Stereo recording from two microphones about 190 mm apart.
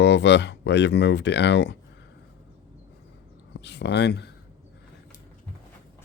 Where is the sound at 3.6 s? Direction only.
65° left (ahead or behind).